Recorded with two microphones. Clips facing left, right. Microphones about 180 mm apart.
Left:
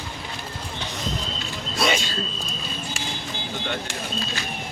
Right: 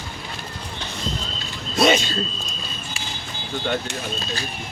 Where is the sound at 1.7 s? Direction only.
25° right (ahead or behind).